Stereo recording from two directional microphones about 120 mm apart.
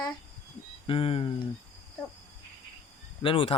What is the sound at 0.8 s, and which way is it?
Speech, 50° left (ahead or behind).